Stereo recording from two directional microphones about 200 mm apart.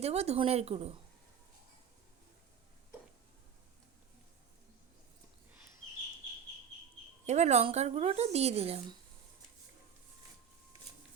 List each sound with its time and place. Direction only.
0.0 s speech: 30° right (ahead or behind)
7.3 s speech: 35° right (ahead or behind)